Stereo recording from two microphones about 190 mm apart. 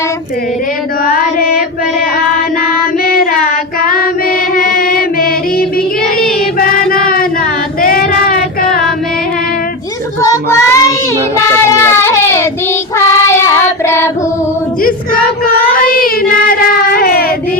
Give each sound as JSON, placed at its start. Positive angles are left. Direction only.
{"t": 1.0, "sound": "mantra", "side_deg": 50}
{"t": 3.8, "sound": "child singing", "side_deg": 50}
{"t": 4.5, "sound": "a sound", "side_deg": 50}
{"t": 6.2, "sound": "music", "side_deg": 50}
{"t": 7.8, "sound": "child singing", "side_deg": 50}
{"t": 10.2, "sound": "child singing", "side_deg": 15}
{"t": 11.8, "sound": "baby cry", "side_deg": 15}
{"t": 13.0, "sound": "child singing", "side_deg": 15}
{"t": 15.4, "sound": "child singing", "side_deg": 50}